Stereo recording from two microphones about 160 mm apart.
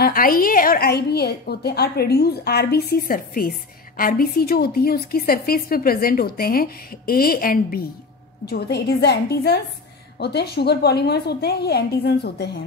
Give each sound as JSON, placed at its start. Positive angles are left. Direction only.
{"t": 0.0, "sound": "a woman's voice", "side_deg": 65}
{"t": 8.5, "sound": "a woman's voice", "side_deg": 90}